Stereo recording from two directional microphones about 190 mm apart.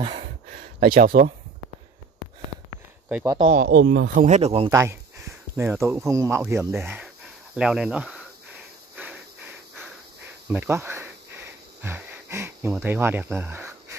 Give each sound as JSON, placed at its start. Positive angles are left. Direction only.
{"t": 0.2, "sound": "a sound", "side_deg": -50}
{"t": 3.4, "sound": "speech", "side_deg": -45}
{"t": 3.7, "sound": "speech", "side_deg": -65}
{"t": 4.1, "sound": "speech", "side_deg": -40}
{"t": 4.6, "sound": "speech", "side_deg": -15}
{"t": 7.5, "sound": "cricket", "side_deg": -5}
{"t": 10.5, "sound": "wheeze", "side_deg": -10}
{"t": 12.8, "sound": "speech", "side_deg": -10}